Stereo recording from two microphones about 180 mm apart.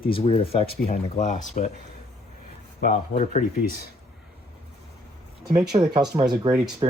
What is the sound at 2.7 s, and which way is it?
Speech, 45° left (ahead or behind).